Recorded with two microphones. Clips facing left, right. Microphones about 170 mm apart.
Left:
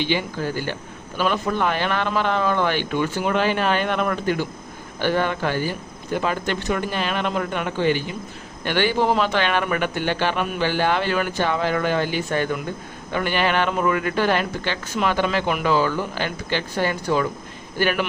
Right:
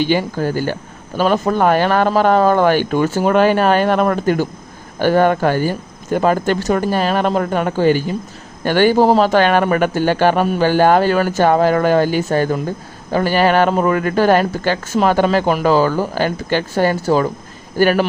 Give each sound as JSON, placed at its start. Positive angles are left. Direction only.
{"t": 0.0, "sound": "a man's voice", "side_deg": -45}